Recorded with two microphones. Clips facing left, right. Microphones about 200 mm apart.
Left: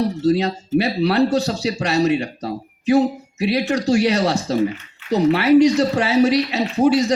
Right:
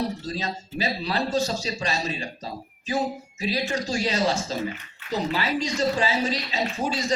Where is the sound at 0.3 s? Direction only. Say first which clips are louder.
Left 14 dB; 65° left (ahead or behind).